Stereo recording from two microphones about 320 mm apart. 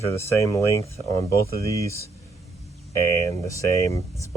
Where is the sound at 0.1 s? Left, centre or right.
Centre.